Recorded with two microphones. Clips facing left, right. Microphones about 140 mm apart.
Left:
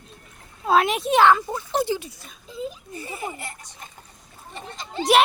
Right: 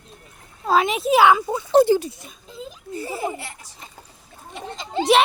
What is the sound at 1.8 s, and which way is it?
Speech, 45° right (ahead or behind).